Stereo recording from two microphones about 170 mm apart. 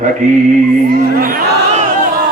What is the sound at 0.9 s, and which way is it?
Speech, 60° right (ahead or behind).